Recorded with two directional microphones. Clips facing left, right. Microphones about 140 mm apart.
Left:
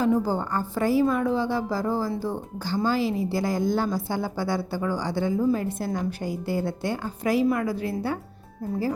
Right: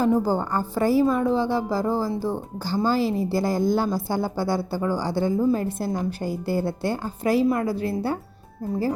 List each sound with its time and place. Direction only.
0.0 s a woman's voice: 35° right (ahead or behind)